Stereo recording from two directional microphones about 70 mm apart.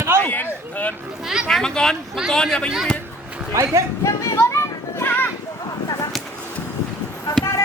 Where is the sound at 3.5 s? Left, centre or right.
Right.